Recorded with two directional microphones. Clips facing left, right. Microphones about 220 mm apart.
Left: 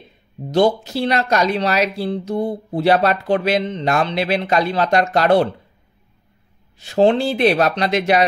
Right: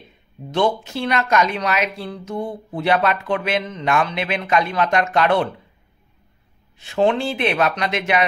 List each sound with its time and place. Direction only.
0.5 s speech: 40° left (ahead or behind)
6.8 s speech: 35° left (ahead or behind)